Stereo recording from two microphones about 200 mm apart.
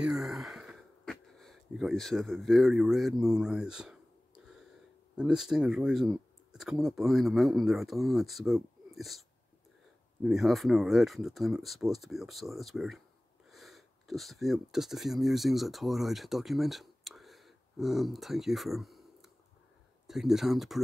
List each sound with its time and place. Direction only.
0.0 s a sound: centre (ahead or behind)
5.1 s speech: 5° right (ahead or behind)
10.2 s speech: centre (ahead or behind)